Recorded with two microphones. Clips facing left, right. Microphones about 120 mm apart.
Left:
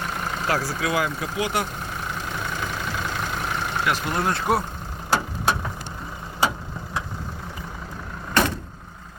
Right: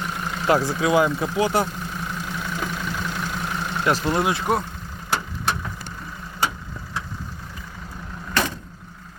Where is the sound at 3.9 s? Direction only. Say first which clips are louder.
Right 5 dB; 35° right (ahead or behind).